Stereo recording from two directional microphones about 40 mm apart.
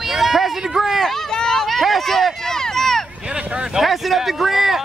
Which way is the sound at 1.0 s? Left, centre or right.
Centre.